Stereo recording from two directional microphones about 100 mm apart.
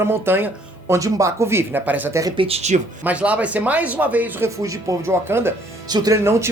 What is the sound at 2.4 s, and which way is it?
Speech, 80° right.